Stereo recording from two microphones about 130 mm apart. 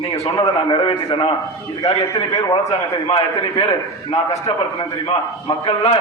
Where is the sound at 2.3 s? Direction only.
30° left (ahead or behind).